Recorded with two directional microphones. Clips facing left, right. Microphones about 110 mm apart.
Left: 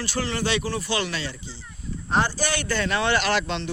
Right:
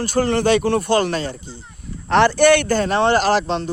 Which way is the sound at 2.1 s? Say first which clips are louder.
Right 11 dB; 70° right (ahead or behind).